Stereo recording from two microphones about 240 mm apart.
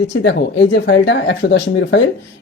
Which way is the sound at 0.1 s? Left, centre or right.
Left.